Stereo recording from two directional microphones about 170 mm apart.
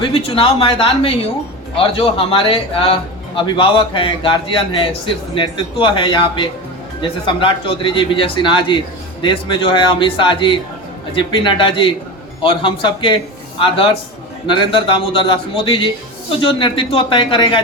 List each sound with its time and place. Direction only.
0.0 s a man's voice: 35° left (ahead or behind)